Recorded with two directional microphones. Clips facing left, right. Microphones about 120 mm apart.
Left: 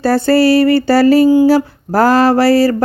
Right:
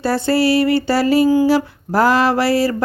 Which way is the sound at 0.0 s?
40° left (ahead or behind).